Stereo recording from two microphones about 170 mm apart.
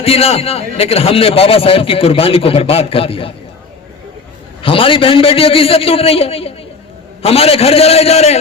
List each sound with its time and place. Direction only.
0.0 s a man's voice: 35° left (ahead or behind)
4.6 s a man's voice: 30° left (ahead or behind)